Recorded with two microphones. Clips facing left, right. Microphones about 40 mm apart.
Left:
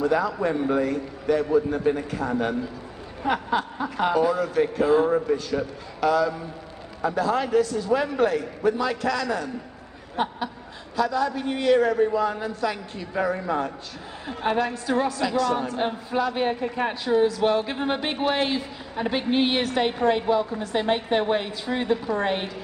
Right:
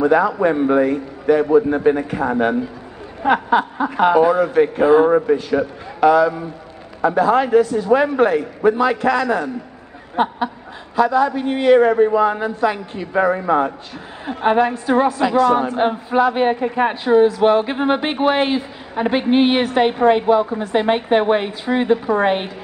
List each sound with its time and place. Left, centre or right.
0.0 s speech: right
10.1 s a sound: right
11.0 s speech: right
13.1 s speech: right